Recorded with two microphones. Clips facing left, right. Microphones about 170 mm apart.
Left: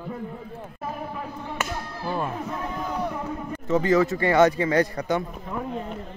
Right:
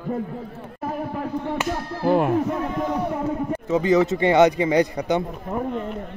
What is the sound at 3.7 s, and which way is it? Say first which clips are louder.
A man's voice: right 1 dB; 15° right (ahead or behind).